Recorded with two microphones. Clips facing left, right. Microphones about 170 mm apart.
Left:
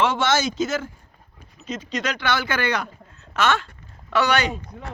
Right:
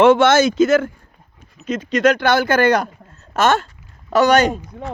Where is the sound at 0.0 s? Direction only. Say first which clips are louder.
Right 10 dB; 55° right (ahead or behind).